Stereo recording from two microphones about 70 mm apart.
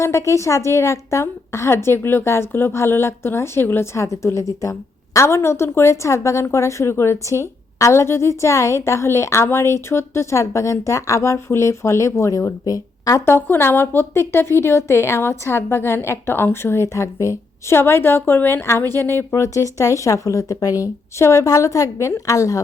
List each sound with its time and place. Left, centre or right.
0.0 s a woman's voice: left
13.2 s a woman's voice: left
19.4 s a woman's voice: left